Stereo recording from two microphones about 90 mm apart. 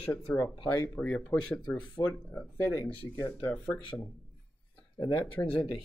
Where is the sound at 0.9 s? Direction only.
15° left (ahead or behind).